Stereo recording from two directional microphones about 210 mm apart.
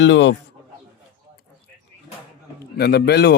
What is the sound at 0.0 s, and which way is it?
Speech, 60° left (ahead or behind).